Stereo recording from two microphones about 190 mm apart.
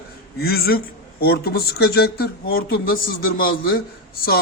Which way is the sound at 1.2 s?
55° left (ahead or behind).